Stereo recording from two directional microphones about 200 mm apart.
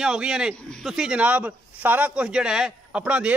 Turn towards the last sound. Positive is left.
turn(degrees=-5)  # may be behind; listen again after turning